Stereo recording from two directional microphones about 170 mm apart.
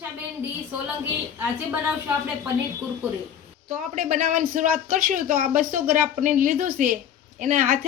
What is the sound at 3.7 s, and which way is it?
Speech, 45° right (ahead or behind).